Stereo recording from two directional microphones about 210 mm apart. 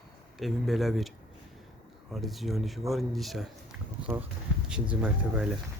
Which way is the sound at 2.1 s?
Centre (ahead or behind).